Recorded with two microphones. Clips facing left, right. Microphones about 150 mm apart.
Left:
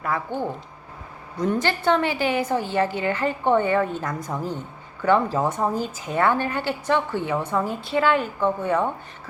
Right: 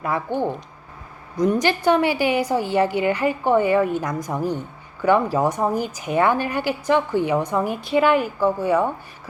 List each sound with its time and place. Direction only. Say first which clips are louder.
0.0 s a woman's voice: right 3 dB; 20° right (ahead or behind)